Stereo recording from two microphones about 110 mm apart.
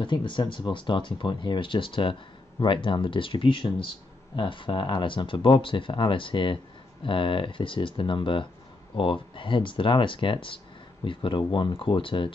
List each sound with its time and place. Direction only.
0.0 s speech: 45° left (ahead or behind)